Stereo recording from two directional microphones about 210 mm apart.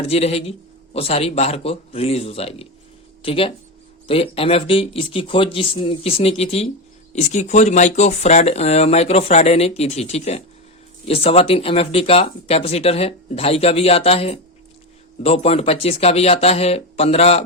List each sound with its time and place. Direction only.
0.1 s speech: 30° left (ahead or behind)